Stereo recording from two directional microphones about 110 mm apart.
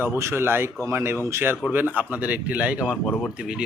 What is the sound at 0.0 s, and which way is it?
Speech, 20° right (ahead or behind).